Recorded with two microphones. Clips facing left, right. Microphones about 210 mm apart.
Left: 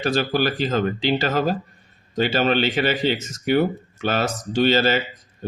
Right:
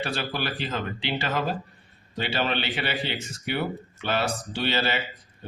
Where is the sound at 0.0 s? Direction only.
45° left (ahead or behind).